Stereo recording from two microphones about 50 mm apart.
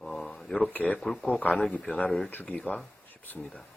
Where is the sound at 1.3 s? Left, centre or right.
Left.